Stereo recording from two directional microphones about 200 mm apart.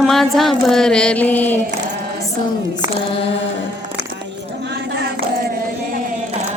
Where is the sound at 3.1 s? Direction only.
30° left (ahead or behind).